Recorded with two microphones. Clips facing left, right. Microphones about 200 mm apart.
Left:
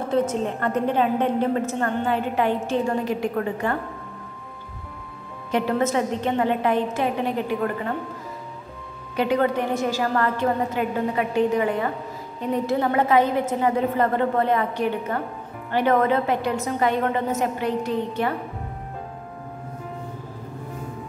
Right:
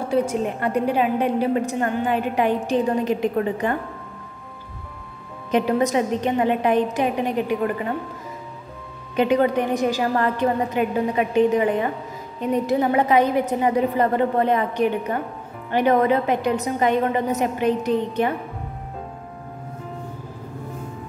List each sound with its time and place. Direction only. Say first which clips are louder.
0.1 s a woman's voice: right 1 dB; 10° right (ahead or behind)
5.5 s a woman's voice: right 3 dB; 15° right (ahead or behind)
9.1 s a woman's voice: right 3 dB; 20° right (ahead or behind)